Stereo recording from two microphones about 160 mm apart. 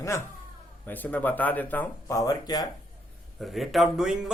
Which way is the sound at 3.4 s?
Centre (ahead or behind).